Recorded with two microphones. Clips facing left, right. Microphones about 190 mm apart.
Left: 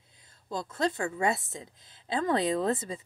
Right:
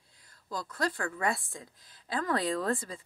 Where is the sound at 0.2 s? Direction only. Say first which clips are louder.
Left 3 dB; 25° left (ahead or behind).